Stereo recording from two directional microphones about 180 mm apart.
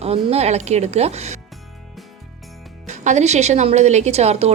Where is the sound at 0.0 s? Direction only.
35° right (ahead or behind).